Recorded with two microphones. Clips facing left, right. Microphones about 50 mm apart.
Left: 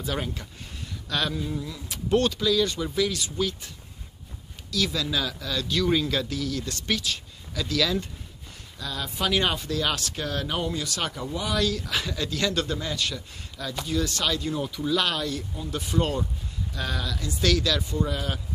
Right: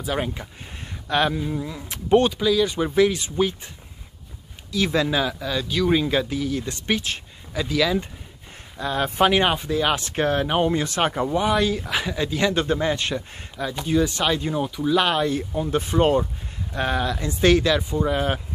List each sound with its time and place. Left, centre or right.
0.0 s speech: right
2.1 s speech: centre
2.8 s speech: right
8.7 s speech: right
9.3 s speech: right
15.5 s speech: right